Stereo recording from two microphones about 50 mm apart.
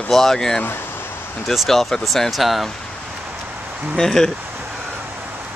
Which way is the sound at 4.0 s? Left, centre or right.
Centre.